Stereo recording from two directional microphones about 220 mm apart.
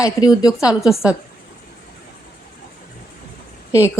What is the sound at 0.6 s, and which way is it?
Speech, centre (ahead or behind).